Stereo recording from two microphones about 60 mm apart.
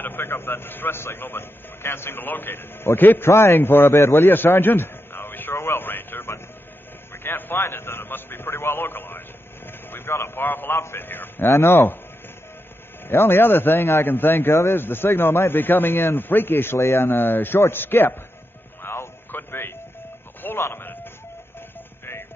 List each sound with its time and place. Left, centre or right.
0.0 s a man's voice: left
3.3 s a man's voice: left
11.4 s speech: left
13.1 s a man's voice: left
14.5 s speech: left
14.8 s a man's voice: left
18.8 s a sound: left